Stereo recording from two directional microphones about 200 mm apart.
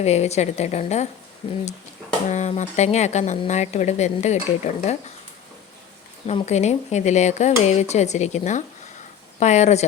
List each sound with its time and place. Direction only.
0.0 s speech: 35° left (ahead or behind)
6.2 s speech: 35° left (ahead or behind)